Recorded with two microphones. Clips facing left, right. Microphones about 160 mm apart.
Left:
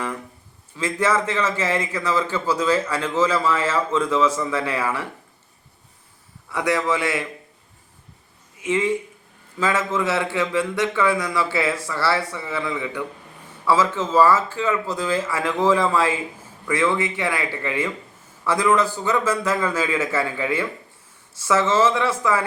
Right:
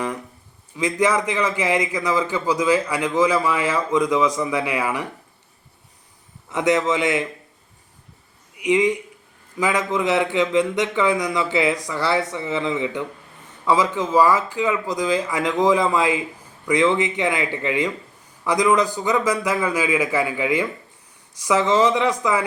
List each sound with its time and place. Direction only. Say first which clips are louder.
0.8 s a man's voice: right 2 dB; 15° right (ahead or behind)
6.5 s a man's voice: right 2 dB; 20° right (ahead or behind)
8.5 s a man's voice: right 3 dB; 15° right (ahead or behind)